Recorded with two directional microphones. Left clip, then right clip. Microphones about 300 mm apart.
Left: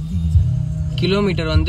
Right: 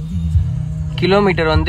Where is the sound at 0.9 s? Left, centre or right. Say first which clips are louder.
Right 6 dB; centre.